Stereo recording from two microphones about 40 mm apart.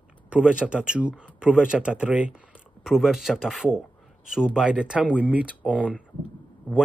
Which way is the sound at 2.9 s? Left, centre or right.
Centre.